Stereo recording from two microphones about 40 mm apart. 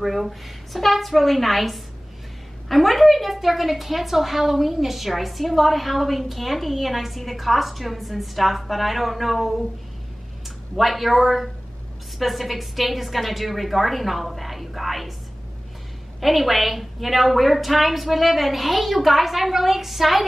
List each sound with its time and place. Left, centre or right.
0.0 s a woman's voice: centre
10.8 s a woman's voice: centre
16.2 s a woman's voice: centre